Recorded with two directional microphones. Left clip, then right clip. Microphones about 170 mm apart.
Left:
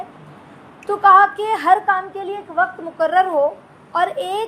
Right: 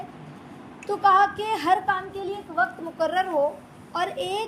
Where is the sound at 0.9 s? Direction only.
20° left (ahead or behind).